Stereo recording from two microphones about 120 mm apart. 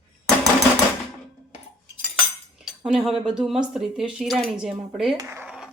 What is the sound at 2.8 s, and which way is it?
Speech, centre (ahead or behind).